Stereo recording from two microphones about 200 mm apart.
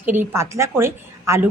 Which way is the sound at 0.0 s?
10° right (ahead or behind).